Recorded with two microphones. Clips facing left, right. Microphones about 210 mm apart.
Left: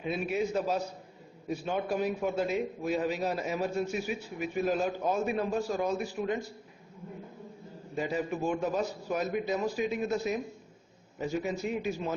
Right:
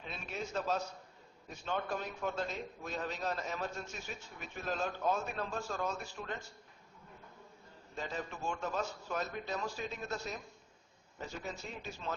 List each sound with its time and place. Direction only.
0.0 s a man's voice: 10° left (ahead or behind)
7.9 s a man's voice: 10° left (ahead or behind)